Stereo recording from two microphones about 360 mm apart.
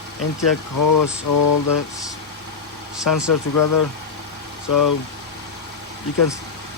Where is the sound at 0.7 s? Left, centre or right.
Left.